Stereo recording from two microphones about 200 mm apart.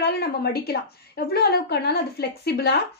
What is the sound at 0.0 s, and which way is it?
A woman's voice, 55° left (ahead or behind).